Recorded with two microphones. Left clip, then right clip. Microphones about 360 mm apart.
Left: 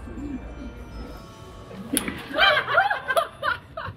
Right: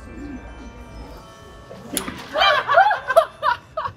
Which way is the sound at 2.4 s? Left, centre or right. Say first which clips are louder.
Right 4 dB; centre.